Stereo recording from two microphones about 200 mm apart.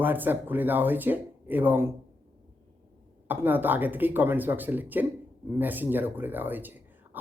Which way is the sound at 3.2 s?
10° right (ahead or behind).